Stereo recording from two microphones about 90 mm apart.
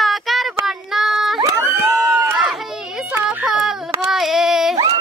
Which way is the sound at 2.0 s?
25° right (ahead or behind).